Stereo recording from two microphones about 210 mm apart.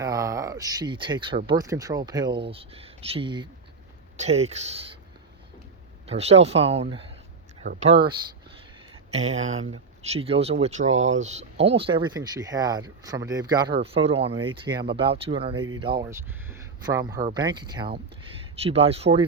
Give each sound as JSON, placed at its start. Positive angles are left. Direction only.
{"t": 0.0, "sound": "a sound", "side_deg": -15}
{"t": 1.5, "sound": "speech", "side_deg": -15}
{"t": 6.1, "sound": "speech", "side_deg": -30}
{"t": 9.1, "sound": "speech", "side_deg": -30}
{"t": 16.0, "sound": "speech", "side_deg": -10}